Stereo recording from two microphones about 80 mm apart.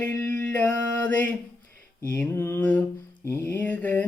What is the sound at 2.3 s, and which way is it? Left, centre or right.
Mantra, left.